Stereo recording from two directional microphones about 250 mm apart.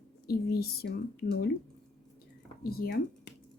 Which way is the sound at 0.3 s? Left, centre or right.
Left.